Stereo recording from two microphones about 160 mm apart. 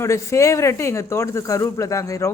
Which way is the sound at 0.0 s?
20° left (ahead or behind).